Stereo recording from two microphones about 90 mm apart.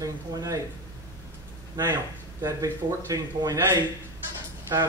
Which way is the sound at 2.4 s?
40° right (ahead or behind).